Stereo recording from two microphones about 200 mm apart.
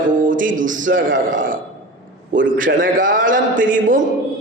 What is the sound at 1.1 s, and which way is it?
Speech, 70° right (ahead or behind).